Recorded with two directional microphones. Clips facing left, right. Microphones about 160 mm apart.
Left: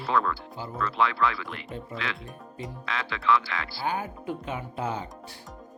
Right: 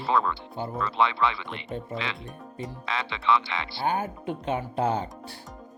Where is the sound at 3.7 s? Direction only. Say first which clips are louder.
Right 4 dB; 25° right (ahead or behind).